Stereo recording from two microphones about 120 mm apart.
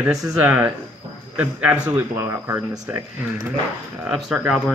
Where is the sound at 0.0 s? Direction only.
5° right (ahead or behind); by 2.6 s 20° right (ahead or behind).